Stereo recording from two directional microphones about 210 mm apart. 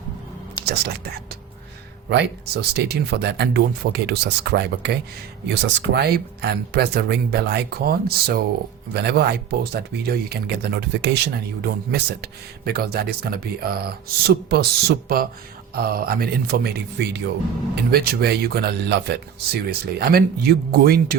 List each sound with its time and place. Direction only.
0.6 s speech: 50° right (ahead or behind)